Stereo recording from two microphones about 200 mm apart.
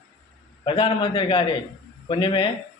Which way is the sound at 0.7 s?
25° left (ahead or behind).